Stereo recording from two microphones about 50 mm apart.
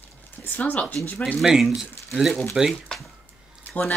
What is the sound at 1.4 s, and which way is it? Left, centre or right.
Speech, centre.